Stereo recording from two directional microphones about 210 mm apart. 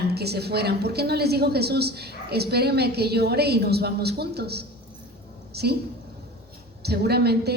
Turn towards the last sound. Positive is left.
turn(degrees=-50)  # may be behind; listen again after turning